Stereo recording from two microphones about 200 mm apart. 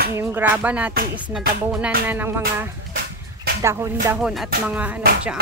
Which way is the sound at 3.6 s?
15° right (ahead or behind).